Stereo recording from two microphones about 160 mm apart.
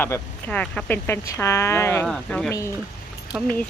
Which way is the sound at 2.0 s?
5° left (ahead or behind).